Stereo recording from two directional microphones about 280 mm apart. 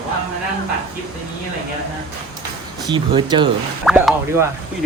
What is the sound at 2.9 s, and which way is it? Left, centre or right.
Speech, centre.